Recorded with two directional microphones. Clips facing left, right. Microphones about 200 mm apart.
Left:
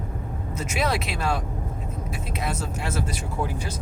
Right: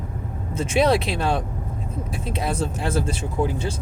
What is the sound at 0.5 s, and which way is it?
Speech, 30° right (ahead or behind).